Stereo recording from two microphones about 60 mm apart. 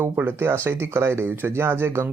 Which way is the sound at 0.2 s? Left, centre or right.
Right.